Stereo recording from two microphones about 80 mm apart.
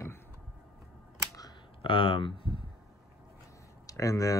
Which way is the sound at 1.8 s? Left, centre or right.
Left.